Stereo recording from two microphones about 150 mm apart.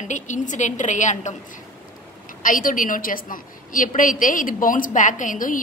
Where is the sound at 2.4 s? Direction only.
65° left (ahead or behind).